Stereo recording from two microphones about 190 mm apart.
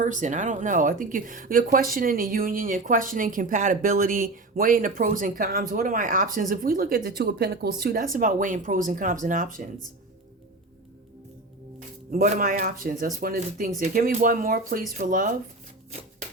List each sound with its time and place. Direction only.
0.0 s speech: 40° right (ahead or behind)
12.1 s speech: 45° right (ahead or behind)